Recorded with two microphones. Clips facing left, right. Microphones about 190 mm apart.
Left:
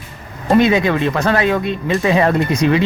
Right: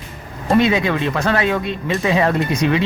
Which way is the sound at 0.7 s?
40° left (ahead or behind).